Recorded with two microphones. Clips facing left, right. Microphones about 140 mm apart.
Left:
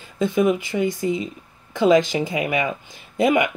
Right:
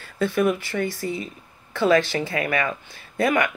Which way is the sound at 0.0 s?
15° left (ahead or behind).